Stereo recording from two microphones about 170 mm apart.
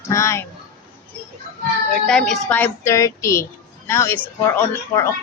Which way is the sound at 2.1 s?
5° left (ahead or behind).